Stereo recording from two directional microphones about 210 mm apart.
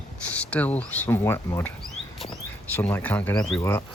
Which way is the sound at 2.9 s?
10° left (ahead or behind).